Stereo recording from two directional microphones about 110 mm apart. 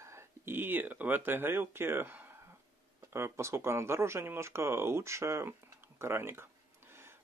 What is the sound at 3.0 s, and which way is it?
Speech, 25° right (ahead or behind).